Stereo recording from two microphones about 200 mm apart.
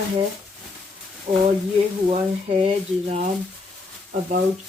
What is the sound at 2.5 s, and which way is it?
Speech, 25° right (ahead or behind).